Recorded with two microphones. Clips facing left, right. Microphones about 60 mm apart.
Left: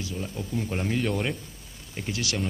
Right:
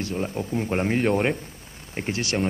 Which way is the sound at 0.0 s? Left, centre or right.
Right.